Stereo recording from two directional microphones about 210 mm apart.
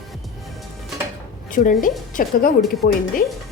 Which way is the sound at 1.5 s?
40° left (ahead or behind).